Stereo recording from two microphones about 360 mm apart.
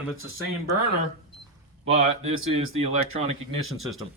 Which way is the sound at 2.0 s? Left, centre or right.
Centre.